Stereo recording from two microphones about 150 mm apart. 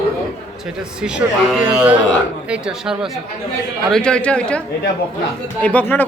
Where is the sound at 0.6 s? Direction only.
5° right (ahead or behind); by 6.1 s 10° left (ahead or behind).